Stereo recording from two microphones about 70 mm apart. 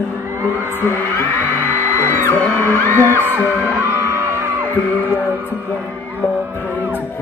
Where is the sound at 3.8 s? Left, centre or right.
Right.